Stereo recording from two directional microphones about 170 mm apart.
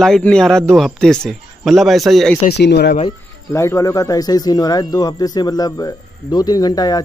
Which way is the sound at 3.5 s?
15° left (ahead or behind).